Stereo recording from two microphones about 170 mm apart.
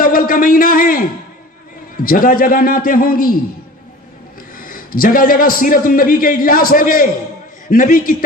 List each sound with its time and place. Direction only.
0.0 s speech: 55° left (ahead or behind)
2.0 s a man's voice: 55° left (ahead or behind)
4.5 s a man's voice: 55° left (ahead or behind)